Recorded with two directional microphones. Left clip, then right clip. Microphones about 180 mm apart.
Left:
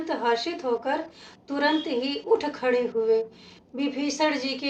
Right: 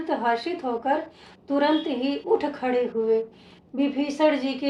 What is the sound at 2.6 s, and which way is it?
A woman's voice, 30° right (ahead or behind).